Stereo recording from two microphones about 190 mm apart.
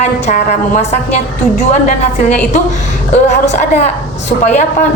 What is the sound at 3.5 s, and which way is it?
Speech, 40° left (ahead or behind).